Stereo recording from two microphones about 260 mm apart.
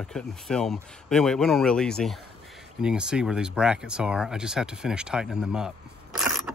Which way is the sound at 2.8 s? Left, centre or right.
Centre.